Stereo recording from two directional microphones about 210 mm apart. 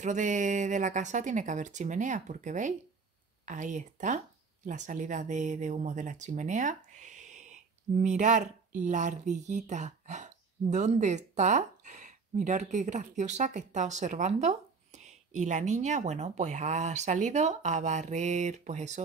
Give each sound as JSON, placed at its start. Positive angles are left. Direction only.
{"t": 0.0, "sound": "speech", "side_deg": -35}